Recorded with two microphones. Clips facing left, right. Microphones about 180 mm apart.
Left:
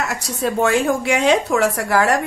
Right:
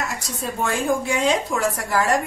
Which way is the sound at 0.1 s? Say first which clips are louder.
Left 7 dB; 70° left (ahead or behind).